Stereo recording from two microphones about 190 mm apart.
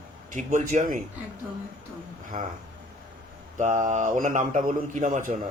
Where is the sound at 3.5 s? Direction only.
40° right (ahead or behind).